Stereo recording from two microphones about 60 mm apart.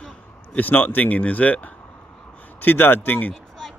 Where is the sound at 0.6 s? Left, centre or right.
Left.